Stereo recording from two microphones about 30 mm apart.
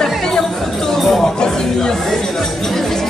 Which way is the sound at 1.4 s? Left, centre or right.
Left.